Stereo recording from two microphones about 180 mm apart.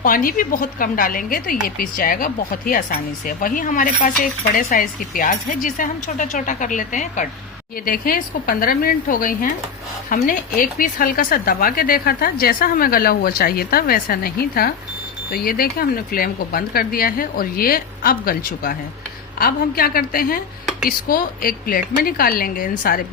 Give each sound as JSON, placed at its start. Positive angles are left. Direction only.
{"t": 0.0, "sound": "a woman's voice", "side_deg": 50}